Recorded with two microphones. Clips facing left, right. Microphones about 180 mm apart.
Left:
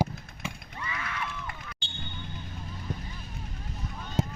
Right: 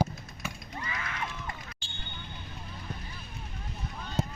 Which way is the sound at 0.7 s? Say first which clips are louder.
Right 1 dB; 35° right (ahead or behind).